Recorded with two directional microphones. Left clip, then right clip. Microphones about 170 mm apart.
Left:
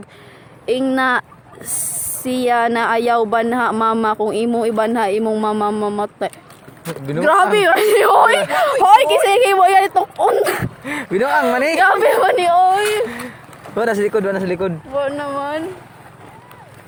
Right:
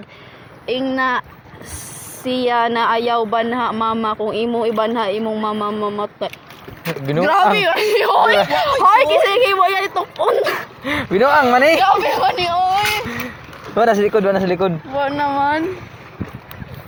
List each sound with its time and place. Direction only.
0.6 s a woman's voice: 50° left (ahead or behind)
2.2 s a woman's voice: 40° left (ahead or behind)
7.5 s speech: 55° left (ahead or behind)
10.8 s speech: centre (ahead or behind)
11.9 s speech: 50° left (ahead or behind)
13.7 s a man's voice: 10° left (ahead or behind)
15.0 s speech: 40° left (ahead or behind)